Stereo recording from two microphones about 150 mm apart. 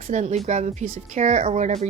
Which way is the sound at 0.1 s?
50° right (ahead or behind).